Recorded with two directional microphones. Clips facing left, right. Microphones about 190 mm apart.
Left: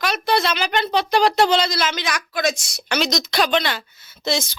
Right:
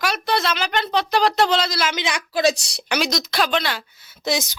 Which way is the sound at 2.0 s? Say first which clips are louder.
Right 3 dB; 25° right (ahead or behind).